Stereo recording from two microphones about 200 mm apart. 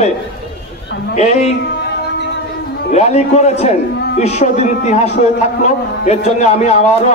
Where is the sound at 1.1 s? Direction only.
35° left (ahead or behind).